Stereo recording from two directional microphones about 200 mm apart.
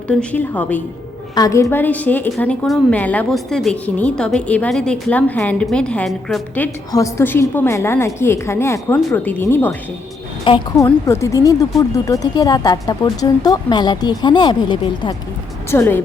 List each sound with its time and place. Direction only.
0.1 s a woman's voice: 5° left (ahead or behind)
6.9 s a woman's voice: 15° left (ahead or behind)
10.4 s speech: 25° left (ahead or behind)
10.8 s speech: 15° left (ahead or behind)
15.7 s a woman's voice: 10° left (ahead or behind)